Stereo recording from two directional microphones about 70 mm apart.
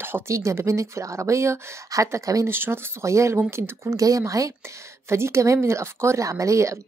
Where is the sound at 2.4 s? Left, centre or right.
Right.